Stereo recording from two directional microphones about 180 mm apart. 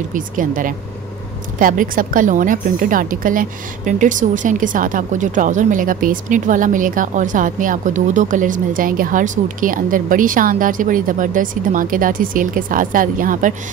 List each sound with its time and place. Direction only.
0.1 s speech: 50° right (ahead or behind)